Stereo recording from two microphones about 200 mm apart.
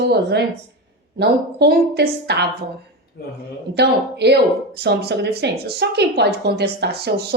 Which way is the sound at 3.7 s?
55° right (ahead or behind).